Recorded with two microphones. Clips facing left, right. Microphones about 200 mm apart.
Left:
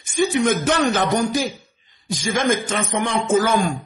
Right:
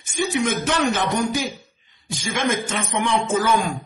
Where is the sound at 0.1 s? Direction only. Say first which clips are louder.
Left 4 dB; 40° left (ahead or behind).